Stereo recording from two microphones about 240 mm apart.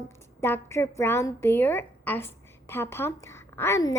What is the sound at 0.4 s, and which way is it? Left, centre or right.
A woman's voice, centre.